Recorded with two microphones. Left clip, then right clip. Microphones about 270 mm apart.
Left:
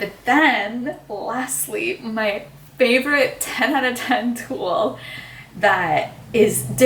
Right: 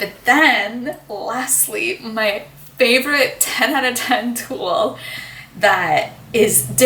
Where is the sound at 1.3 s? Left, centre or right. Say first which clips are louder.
Right 3 dB; centre.